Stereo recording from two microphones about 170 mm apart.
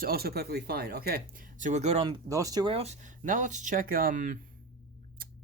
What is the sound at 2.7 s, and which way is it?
Speech, 40° right (ahead or behind).